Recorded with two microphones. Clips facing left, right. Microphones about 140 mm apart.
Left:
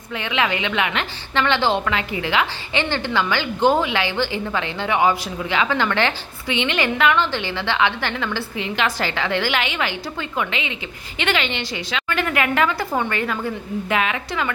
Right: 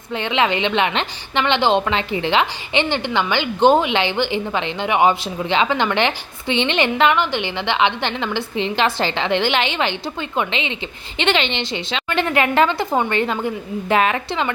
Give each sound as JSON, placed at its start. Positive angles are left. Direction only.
{"t": 0.1, "sound": "a woman's voice", "side_deg": -30}
{"t": 13.9, "sound": "a woman's voice", "side_deg": -40}
{"t": 14.3, "sound": "a woman's voice", "side_deg": -25}